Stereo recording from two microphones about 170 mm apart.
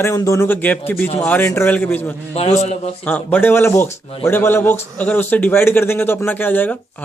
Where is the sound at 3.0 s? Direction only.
10° left (ahead or behind).